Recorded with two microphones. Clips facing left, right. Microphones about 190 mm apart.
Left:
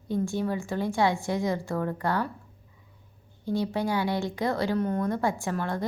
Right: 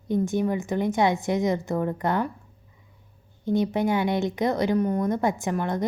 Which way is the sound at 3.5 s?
20° right (ahead or behind).